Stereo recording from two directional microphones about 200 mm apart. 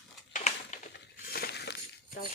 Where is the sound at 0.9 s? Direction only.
50° left (ahead or behind).